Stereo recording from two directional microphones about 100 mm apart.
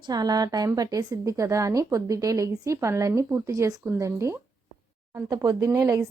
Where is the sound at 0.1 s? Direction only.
40° right (ahead or behind).